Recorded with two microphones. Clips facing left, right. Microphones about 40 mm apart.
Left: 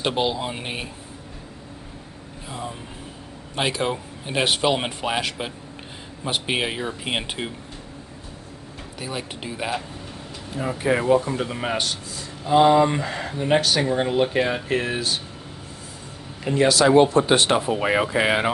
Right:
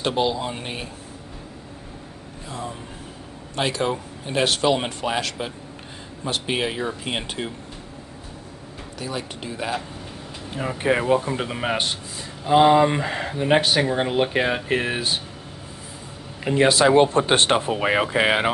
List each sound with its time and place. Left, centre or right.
0.0 s speech: centre
3.5 s speech: centre
9.0 s speech: centre
10.8 s speech: right
16.5 s speech: right
17.6 s speech: right